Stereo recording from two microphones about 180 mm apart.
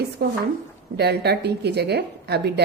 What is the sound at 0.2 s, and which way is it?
A woman's voice, 55° right (ahead or behind).